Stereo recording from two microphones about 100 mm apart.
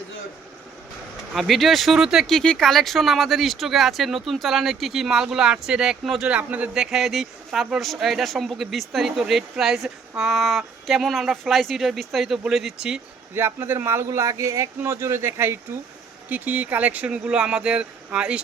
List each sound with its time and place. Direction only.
1.3 s speech: centre (ahead or behind)
13.3 s speech: 20° right (ahead or behind)